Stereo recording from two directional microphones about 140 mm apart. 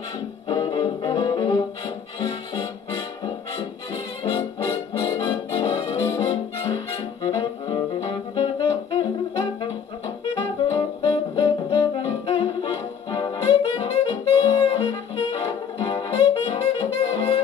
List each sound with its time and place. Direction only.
0.5 s music: 30° left (ahead or behind)
4.2 s brass instrument: 25° left (ahead or behind)
5.2 s brass instrument: 35° left (ahead or behind)
12.3 s music: 35° left (ahead or behind)
13.6 s saxophone: 40° left (ahead or behind)
14.3 s saxophone: 25° left (ahead or behind)
14.8 s saxophone: 35° left (ahead or behind)
17.0 s saxophone: 45° left (ahead or behind)